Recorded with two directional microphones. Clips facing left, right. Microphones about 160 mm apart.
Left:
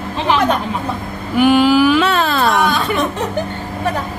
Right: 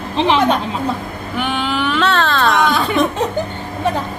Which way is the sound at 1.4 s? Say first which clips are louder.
Left 10 dB; 5° left (ahead or behind).